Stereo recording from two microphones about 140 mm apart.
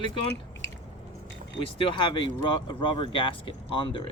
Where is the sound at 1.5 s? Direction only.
40° left (ahead or behind).